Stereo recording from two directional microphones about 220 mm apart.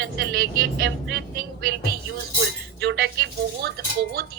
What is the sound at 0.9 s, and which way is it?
Speech, 55° right (ahead or behind).